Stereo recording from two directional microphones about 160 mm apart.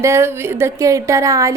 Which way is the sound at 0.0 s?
15° right (ahead or behind).